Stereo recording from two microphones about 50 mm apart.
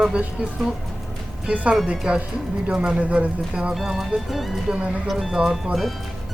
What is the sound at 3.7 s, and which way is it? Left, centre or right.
Speech, centre.